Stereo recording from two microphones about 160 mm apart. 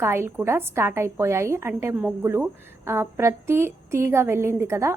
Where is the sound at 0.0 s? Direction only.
15° right (ahead or behind).